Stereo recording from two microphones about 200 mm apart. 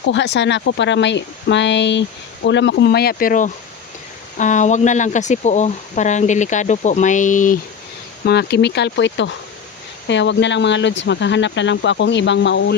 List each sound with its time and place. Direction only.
0.1 s speech: 65° left (ahead or behind); by 7.6 s 40° left (ahead or behind)
8.2 s speech: 55° left (ahead or behind)